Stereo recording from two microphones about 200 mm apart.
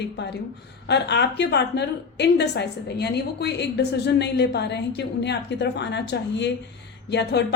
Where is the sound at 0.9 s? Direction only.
60° left (ahead or behind).